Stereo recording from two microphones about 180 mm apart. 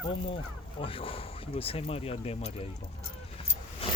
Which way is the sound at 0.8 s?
30° left (ahead or behind).